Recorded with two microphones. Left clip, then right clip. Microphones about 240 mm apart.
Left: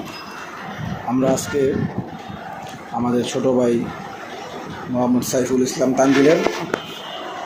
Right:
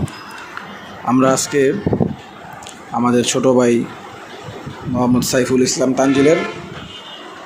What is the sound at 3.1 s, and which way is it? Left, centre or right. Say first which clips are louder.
Speech: right 5 dB; right.